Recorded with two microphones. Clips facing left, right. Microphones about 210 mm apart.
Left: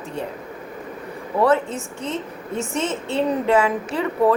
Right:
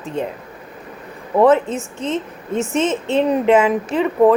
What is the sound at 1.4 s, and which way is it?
Speech, 20° right (ahead or behind).